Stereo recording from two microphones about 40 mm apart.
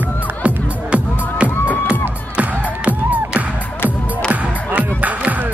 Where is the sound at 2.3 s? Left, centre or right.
Right.